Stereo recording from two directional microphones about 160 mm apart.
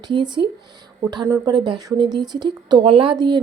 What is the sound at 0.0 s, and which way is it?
A woman's voice, 25° right (ahead or behind).